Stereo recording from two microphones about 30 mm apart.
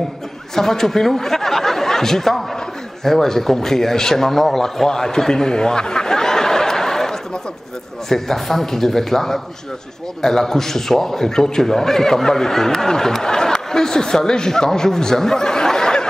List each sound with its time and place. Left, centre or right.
0.6 s a man's voice: centre
4.8 s snicker: centre
8.1 s a man's voice: centre